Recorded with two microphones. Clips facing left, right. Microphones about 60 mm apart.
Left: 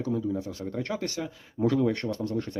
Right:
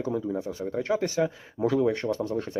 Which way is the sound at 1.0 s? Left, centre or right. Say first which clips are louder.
Right 7 dB; centre.